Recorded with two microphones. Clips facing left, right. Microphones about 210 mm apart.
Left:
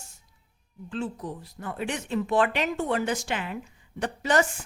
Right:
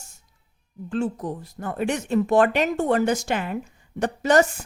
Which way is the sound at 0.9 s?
45° right (ahead or behind).